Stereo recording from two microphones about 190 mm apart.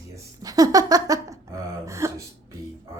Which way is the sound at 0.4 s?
20° right (ahead or behind).